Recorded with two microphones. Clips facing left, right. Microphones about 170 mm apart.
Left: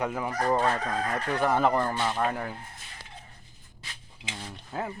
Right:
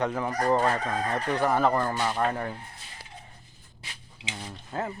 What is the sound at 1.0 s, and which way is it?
Chicken, 20° right (ahead or behind).